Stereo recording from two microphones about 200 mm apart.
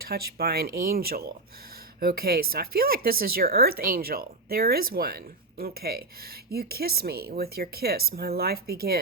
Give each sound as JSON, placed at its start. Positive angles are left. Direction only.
{"t": 0.0, "sound": "speech", "side_deg": -50}